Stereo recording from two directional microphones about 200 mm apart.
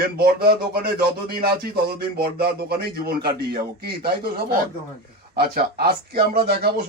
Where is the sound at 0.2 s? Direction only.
50° right (ahead or behind).